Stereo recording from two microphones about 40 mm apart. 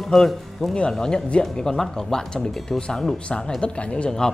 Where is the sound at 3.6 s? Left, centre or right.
Left.